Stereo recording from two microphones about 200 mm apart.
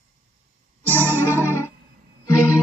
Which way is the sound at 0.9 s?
10° left (ahead or behind).